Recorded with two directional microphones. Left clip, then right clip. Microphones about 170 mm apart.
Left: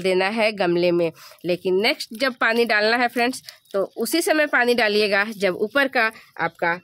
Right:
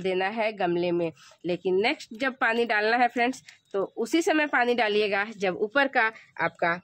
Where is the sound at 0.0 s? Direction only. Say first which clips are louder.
Left 7 dB; 65° left (ahead or behind).